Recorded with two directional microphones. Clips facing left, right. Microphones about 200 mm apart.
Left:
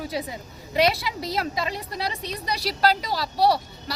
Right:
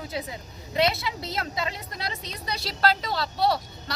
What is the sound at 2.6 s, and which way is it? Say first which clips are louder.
Speech: left 2 dB; 10° left (ahead or behind).